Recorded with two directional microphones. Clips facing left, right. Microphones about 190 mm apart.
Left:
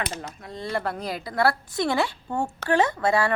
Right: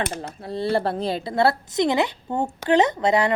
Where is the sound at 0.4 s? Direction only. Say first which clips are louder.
Right 7 dB; 30° right (ahead or behind).